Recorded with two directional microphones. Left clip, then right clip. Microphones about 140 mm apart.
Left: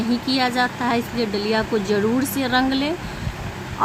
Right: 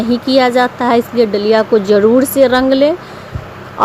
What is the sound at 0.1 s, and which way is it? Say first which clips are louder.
Speech: right 11 dB; 40° right (ahead or behind).